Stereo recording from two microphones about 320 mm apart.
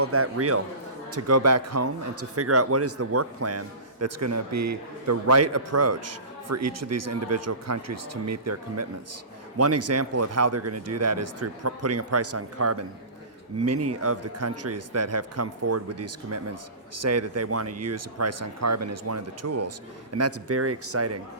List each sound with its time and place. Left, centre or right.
0.0 s a man's voice: right